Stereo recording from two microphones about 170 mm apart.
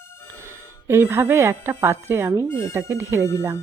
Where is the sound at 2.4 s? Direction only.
20° left (ahead or behind).